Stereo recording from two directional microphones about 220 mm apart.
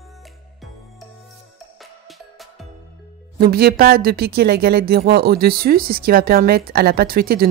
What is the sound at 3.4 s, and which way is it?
A woman's voice, 45° right (ahead or behind).